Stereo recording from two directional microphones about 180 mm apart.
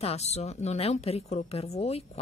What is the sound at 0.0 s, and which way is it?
A woman's voice, 35° left (ahead or behind).